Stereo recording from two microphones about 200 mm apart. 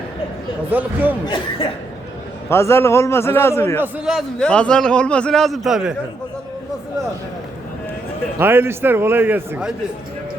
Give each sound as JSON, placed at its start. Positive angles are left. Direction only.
{"t": 0.7, "sound": "a man's voice", "side_deg": -10}
{"t": 1.3, "sound": "speech", "side_deg": 30}
{"t": 2.5, "sound": "a man's voice", "side_deg": 15}
{"t": 3.8, "sound": "a man's voice", "side_deg": -5}
{"t": 8.4, "sound": "a man's voice", "side_deg": -10}